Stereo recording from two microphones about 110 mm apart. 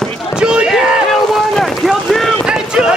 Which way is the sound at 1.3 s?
Centre (ahead or behind).